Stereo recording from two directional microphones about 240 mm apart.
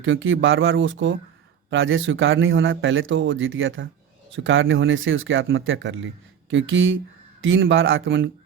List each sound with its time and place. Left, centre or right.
0.0 s speech: right